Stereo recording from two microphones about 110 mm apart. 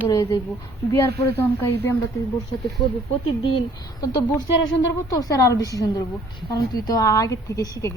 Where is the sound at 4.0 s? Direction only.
35° left (ahead or behind).